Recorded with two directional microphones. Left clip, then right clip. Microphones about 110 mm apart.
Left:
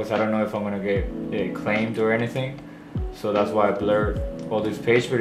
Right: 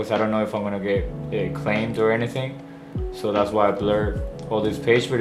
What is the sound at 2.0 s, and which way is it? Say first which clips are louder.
Speech: right 3 dB; 45° right (ahead or behind).